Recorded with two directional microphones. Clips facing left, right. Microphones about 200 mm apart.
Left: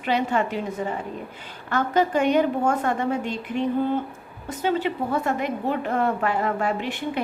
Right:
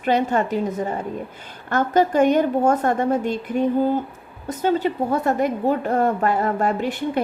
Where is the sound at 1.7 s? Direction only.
45° right (ahead or behind).